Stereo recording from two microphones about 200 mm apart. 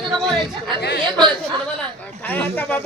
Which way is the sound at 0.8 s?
60° left (ahead or behind).